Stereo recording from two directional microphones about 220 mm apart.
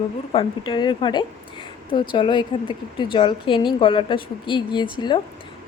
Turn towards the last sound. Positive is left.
turn(degrees=20)  # may be behind; listen again after turning